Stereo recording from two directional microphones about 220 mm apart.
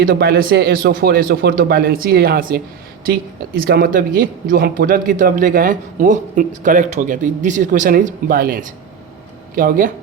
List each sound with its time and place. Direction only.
0.0 s speech: 45° right (ahead or behind)